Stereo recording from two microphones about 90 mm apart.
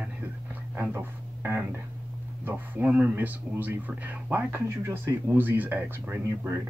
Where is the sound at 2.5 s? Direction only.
15° right (ahead or behind).